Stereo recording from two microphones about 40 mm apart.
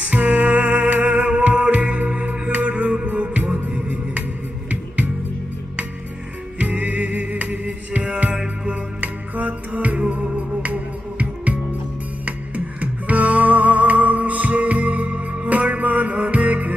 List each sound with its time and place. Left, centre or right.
0.1 s music: right
6.6 s music: right
9.0 s music: right